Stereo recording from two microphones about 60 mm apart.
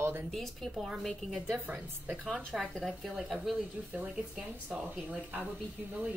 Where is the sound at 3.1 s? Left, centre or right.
Centre.